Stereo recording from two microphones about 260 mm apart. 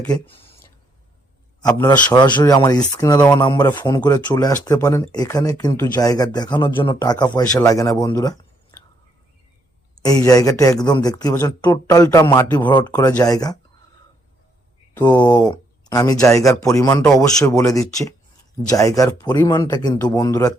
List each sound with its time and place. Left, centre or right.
1.6 s speech: centre
10.0 s speech: centre
14.9 s speech: centre